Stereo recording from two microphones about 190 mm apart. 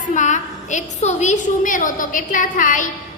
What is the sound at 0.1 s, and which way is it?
A woman's voice, 40° left (ahead or behind).